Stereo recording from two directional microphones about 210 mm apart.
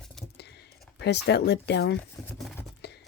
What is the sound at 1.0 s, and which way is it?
Speech, 50° left (ahead or behind).